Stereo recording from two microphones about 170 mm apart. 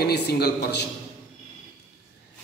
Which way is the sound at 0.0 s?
70° left (ahead or behind).